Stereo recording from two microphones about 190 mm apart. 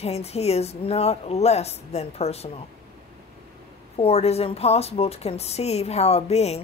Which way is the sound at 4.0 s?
35° left (ahead or behind).